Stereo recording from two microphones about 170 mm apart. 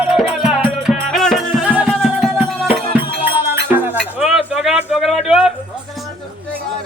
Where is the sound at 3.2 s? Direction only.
30° left (ahead or behind).